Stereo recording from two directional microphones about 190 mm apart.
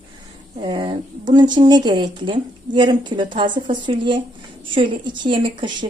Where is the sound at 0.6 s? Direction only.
25° right (ahead or behind).